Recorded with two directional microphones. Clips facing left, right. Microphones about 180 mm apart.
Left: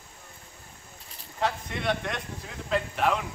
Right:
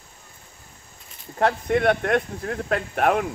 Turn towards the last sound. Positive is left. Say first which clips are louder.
# right 5 dB
turn(degrees=-55)  # may be behind; listen again after turning